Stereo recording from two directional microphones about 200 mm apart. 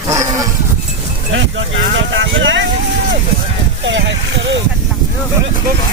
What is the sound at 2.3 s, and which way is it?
Speech, 70° right (ahead or behind).